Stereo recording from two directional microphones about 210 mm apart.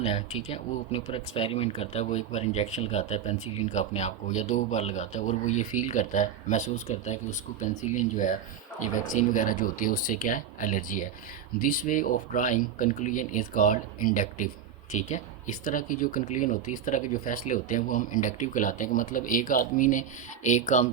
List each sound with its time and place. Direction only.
0.0 s speech: 30° left (ahead or behind)